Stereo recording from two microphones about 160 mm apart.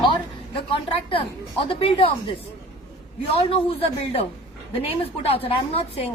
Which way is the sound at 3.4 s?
35° left (ahead or behind).